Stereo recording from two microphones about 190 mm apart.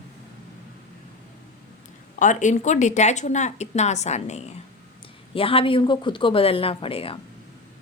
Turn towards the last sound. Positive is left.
turn(degrees=30)  # may be behind; listen again after turning